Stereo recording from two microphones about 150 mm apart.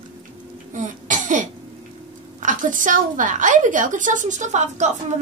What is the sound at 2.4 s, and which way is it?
A woman's voice, 60° right (ahead or behind).